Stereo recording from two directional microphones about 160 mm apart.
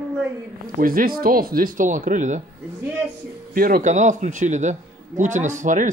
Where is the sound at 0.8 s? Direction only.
65° right (ahead or behind).